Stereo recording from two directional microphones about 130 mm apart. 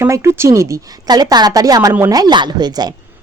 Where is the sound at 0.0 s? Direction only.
20° right (ahead or behind).